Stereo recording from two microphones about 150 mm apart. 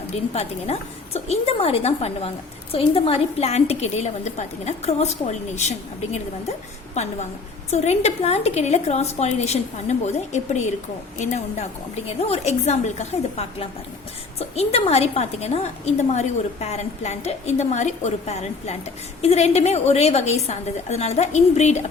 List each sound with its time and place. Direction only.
0.3 s a woman's voice: 45° left (ahead or behind)